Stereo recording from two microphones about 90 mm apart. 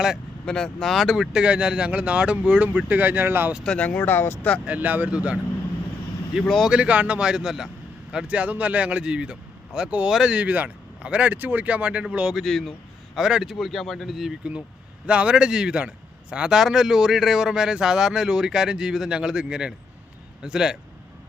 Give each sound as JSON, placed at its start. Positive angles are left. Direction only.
{"t": 0.4, "sound": "speech", "side_deg": 5}
{"t": 3.6, "sound": "speech", "side_deg": 10}
{"t": 3.8, "sound": "speech", "side_deg": 20}
{"t": 4.6, "sound": "speech", "side_deg": -15}
{"t": 6.5, "sound": "speech", "side_deg": 0}
{"t": 6.7, "sound": "speech", "side_deg": -15}
{"t": 15.0, "sound": "speech", "side_deg": -10}